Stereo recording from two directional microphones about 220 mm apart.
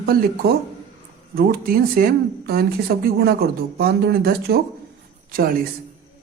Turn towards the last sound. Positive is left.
turn(degrees=-40)  # may be behind; listen again after turning